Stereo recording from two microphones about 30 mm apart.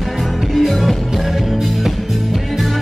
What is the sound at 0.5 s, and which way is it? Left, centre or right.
Music, centre.